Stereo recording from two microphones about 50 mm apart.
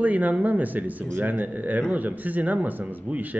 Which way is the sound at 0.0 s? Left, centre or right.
Right.